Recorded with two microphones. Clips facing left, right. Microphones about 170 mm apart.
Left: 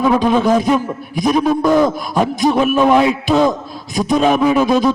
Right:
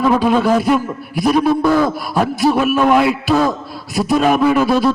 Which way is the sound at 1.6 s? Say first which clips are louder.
Left 1 dB; 15° left (ahead or behind).